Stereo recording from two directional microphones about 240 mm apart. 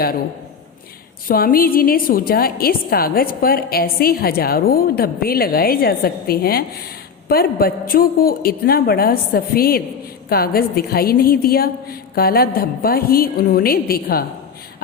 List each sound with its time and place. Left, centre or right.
1.3 s a woman's voice: left